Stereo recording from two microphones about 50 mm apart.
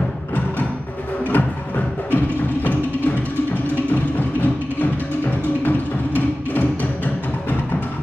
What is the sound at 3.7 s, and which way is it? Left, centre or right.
Music, left.